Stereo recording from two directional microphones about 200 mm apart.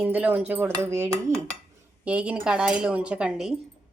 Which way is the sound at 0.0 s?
10° right (ahead or behind).